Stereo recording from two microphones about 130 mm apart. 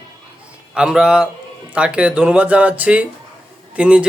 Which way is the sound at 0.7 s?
5° right (ahead or behind).